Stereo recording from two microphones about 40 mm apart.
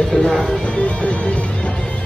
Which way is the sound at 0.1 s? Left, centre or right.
Left.